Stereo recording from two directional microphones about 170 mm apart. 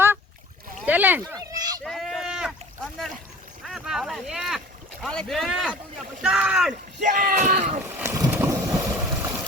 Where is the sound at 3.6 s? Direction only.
5° right (ahead or behind).